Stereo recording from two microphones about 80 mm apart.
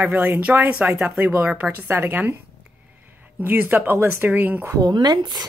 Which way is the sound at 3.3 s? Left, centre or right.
Right.